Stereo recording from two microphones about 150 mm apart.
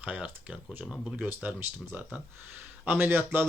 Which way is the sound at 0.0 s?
10° right (ahead or behind).